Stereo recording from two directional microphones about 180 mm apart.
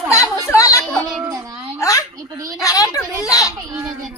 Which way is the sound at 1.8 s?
20° left (ahead or behind).